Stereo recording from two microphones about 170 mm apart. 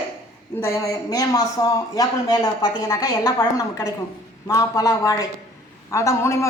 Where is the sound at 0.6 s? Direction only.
15° left (ahead or behind).